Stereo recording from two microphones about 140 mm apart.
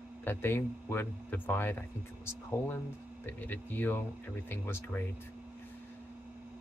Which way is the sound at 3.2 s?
15° left (ahead or behind).